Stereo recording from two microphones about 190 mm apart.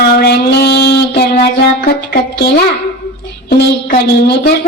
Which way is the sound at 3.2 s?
60° left (ahead or behind).